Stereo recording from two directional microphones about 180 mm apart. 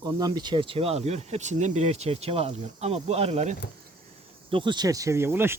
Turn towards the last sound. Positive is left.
turn(degrees=-15)  # may be behind; listen again after turning